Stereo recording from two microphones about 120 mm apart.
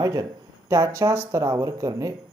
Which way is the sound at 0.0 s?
30° right (ahead or behind).